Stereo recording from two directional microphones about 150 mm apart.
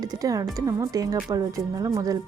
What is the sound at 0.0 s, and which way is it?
Speech, 25° right (ahead or behind).